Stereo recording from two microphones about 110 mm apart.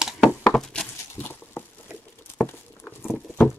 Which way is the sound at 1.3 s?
20° left (ahead or behind).